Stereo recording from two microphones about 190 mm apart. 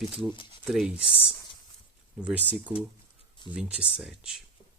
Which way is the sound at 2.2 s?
10° right (ahead or behind).